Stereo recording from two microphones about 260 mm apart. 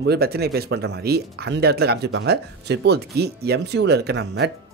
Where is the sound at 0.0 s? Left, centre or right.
Right.